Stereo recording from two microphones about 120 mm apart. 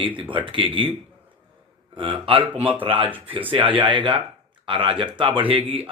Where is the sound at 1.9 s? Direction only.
45° right (ahead or behind).